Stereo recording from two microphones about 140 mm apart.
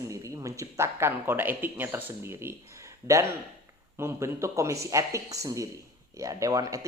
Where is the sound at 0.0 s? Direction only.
20° right (ahead or behind).